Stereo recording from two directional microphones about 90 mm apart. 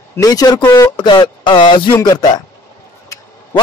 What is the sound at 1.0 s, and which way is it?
Speech, 60° left (ahead or behind).